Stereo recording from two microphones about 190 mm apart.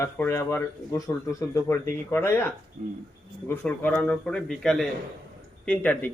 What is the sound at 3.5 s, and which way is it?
A man's voice, 10° left (ahead or behind).